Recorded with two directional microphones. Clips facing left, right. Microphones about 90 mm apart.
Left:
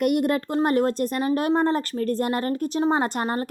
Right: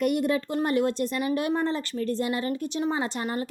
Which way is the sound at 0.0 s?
55° left (ahead or behind).